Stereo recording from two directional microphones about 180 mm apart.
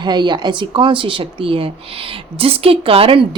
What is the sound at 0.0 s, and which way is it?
A woman's voice, 25° right (ahead or behind).